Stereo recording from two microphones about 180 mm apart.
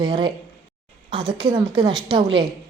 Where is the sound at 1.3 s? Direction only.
25° right (ahead or behind).